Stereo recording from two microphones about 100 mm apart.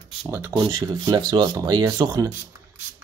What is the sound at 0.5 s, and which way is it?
Speech, 40° right (ahead or behind).